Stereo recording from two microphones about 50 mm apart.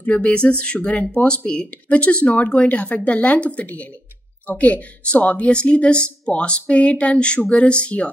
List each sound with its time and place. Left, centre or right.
0.0 s speech: left